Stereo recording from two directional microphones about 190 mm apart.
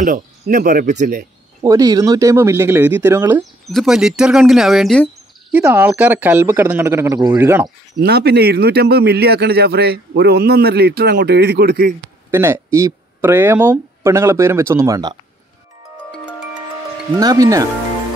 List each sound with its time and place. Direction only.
0.0 s speech: 45° right (ahead or behind)
1.6 s speech: 20° right (ahead or behind)
3.6 s speech: centre (ahead or behind)
8.0 s a man's voice: 60° right (ahead or behind)
12.3 s speech: 15° right (ahead or behind)
17.2 s speech: 20° right (ahead or behind)